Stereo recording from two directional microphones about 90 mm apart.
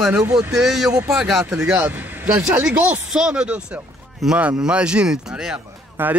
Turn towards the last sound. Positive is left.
turn(degrees=-25)  # may be behind; listen again after turning